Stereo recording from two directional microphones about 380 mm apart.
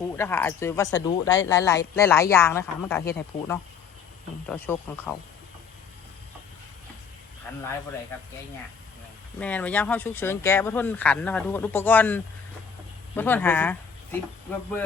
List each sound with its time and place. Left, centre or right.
0.2 s speech: centre
9.4 s speech: centre